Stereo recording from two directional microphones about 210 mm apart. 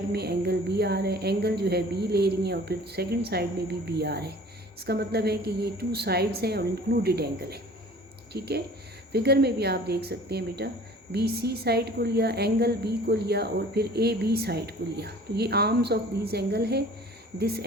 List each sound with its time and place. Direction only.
0.1 s a woman's voice: 50° right (ahead or behind)